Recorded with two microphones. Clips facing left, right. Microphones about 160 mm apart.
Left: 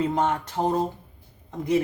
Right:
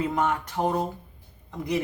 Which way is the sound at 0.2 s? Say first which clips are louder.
Left 1 dB; 25° left (ahead or behind).